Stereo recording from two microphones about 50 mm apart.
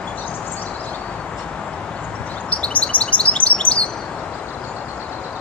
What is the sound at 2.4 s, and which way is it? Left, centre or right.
Chirp, left.